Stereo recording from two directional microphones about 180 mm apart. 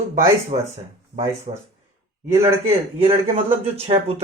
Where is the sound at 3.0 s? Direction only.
35° right (ahead or behind).